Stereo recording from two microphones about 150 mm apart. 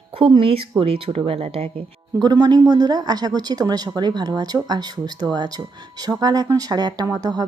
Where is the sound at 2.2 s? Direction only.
25° right (ahead or behind).